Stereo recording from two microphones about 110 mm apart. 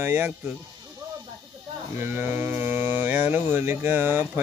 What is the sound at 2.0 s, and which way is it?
Speech, 20° right (ahead or behind).